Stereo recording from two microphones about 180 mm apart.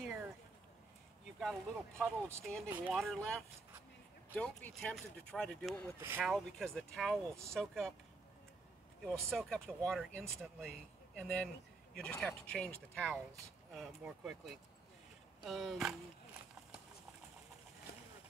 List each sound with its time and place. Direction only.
1.4 s speech: 5° left (ahead or behind)
5.9 s speech: 15° right (ahead or behind)
6.2 s speech: centre (ahead or behind)
9.0 s speech: centre (ahead or behind)
17.9 s a sound: 65° left (ahead or behind)